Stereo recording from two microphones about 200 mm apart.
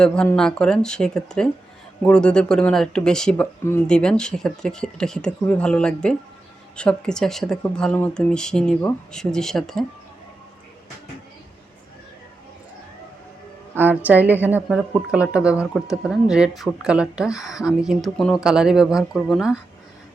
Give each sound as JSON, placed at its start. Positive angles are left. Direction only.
{"t": 0.0, "sound": "speech", "side_deg": 5}
{"t": 13.7, "sound": "a woman's voice", "side_deg": -10}